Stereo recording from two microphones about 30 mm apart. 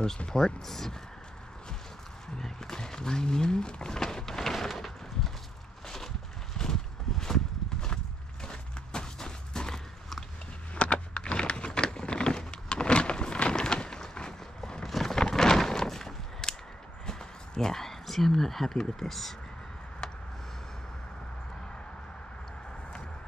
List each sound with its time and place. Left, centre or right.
0.3 s speech: centre
2.3 s speech: centre
2.8 s wild animals: left
6.6 s clip-clop: centre
10.7 s a sound: left
14.8 s a sound: centre
18.9 s speech: centre